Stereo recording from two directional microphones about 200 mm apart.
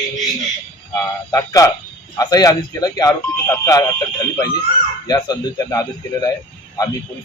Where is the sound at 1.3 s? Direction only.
15° left (ahead or behind).